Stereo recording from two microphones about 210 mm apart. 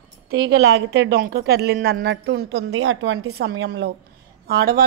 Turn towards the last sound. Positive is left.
turn(degrees=-45)  # may be behind; listen again after turning